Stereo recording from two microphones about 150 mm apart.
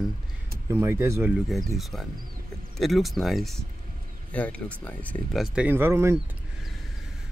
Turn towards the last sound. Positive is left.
turn(degrees=-15)  # may be behind; listen again after turning